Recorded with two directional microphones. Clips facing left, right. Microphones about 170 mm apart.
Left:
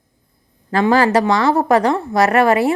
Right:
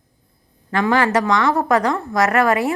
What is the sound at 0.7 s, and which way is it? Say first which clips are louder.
A woman's voice: left 3 dB; 35° left (ahead or behind).